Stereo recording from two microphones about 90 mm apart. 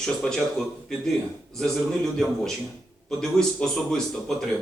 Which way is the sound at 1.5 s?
5° left (ahead or behind).